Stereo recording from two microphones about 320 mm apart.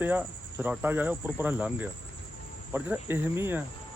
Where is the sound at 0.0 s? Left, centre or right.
Centre.